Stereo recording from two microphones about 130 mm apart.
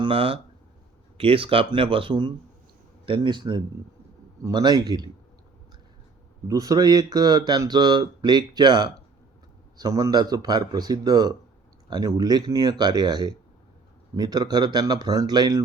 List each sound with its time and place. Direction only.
0.0 s speech: 45° right (ahead or behind)
6.5 s speech: 30° right (ahead or behind)